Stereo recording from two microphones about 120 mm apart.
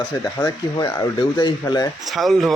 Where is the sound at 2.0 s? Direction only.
Centre (ahead or behind).